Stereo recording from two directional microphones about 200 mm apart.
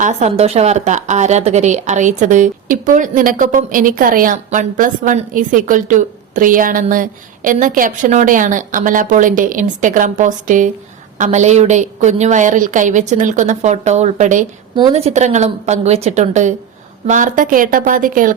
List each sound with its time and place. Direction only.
0.0 s a woman's voice: 35° right (ahead or behind)